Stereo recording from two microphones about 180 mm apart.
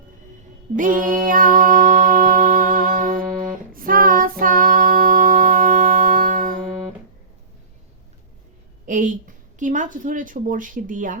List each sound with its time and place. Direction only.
0.8 s music: 45° right (ahead or behind)
8.9 s a woman's voice: 45° right (ahead or behind)